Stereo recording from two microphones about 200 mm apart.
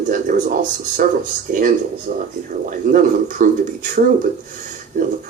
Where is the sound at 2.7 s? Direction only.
40° right (ahead or behind).